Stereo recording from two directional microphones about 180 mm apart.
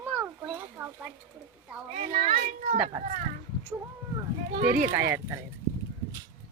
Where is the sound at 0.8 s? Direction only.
10° right (ahead or behind).